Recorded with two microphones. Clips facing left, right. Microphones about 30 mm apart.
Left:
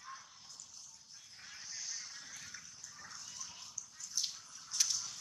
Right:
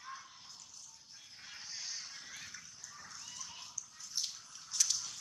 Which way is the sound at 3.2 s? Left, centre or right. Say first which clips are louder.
Right 1 dB; centre.